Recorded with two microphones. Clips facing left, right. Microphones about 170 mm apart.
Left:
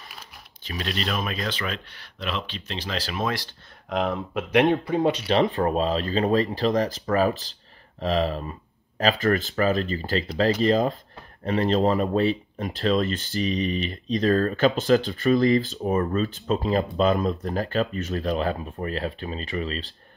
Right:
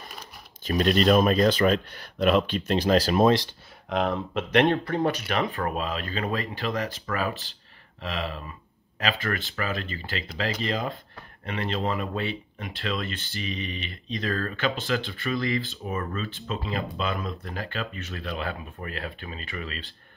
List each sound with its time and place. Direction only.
0.7 s speech: 45° right (ahead or behind)
3.9 s speech: centre (ahead or behind); by 19.9 s 35° left (ahead or behind)